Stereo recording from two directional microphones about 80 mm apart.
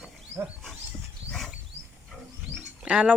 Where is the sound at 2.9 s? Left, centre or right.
Centre.